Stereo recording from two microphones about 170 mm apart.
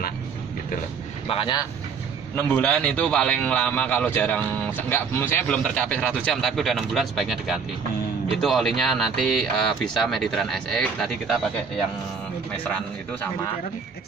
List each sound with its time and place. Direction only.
1.3 s speech: 30° left (ahead or behind)
2.3 s a man's voice: 10° left (ahead or behind)